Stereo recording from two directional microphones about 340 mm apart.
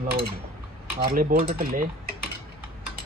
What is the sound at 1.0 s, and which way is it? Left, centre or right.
Speech, right.